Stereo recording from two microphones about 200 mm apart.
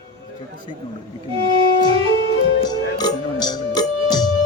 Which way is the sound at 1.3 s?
25° right (ahead or behind).